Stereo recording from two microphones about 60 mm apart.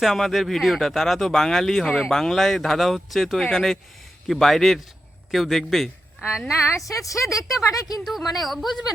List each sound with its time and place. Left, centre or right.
0.0 s speech: centre
6.7 s speech: left
7.7 s speech: left
8.0 s speech: centre